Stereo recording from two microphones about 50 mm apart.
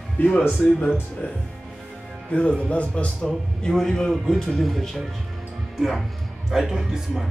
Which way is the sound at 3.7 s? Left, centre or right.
Centre.